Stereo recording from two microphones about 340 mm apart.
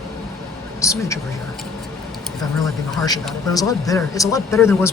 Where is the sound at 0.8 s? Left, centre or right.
Centre.